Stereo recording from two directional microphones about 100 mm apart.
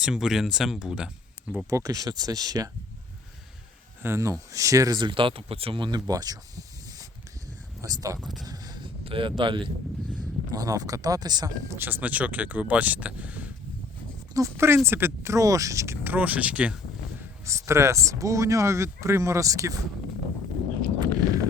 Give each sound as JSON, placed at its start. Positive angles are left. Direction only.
{"t": 0.0, "sound": "speech", "side_deg": -5}
{"t": 1.7, "sound": "speech", "side_deg": -35}
{"t": 4.0, "sound": "speech", "side_deg": -30}
{"t": 4.9, "sound": "speech", "side_deg": -55}
{"t": 6.1, "sound": "speech", "side_deg": -40}
{"t": 7.8, "sound": "speech", "side_deg": -35}
{"t": 8.2, "sound": "speech", "side_deg": 0}
{"t": 8.4, "sound": "a sound", "side_deg": -40}
{"t": 9.0, "sound": "speech", "side_deg": -60}
{"t": 10.2, "sound": "speech", "side_deg": -40}
{"t": 11.8, "sound": "speech", "side_deg": -20}
{"t": 14.3, "sound": "speech", "side_deg": -30}
{"t": 17.2, "sound": "speech", "side_deg": -30}